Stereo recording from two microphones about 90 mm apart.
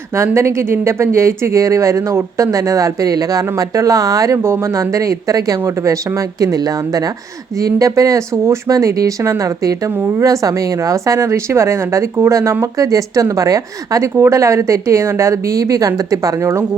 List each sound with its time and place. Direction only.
0.3 s speech: 30° right (ahead or behind)